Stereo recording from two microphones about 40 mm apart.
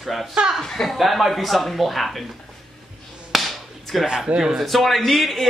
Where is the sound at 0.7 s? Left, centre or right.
Centre.